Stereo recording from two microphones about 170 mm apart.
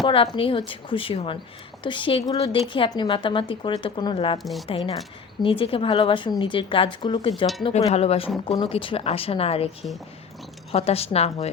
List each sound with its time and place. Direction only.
0.0 s a woman's voice: 30° left (ahead or behind)
7.6 s speech: 40° left (ahead or behind)
10.7 s speech: 35° left (ahead or behind)